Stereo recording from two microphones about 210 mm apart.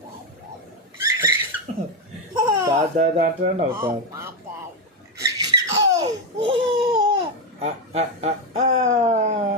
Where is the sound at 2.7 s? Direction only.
35° right (ahead or behind).